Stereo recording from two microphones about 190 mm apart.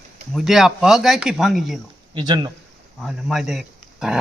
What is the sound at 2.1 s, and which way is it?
Speech, 25° right (ahead or behind).